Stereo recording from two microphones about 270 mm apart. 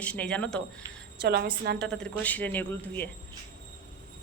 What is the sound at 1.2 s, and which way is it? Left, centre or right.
Speech, right.